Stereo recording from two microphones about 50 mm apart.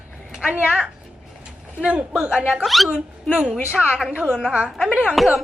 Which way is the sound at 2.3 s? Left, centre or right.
Right.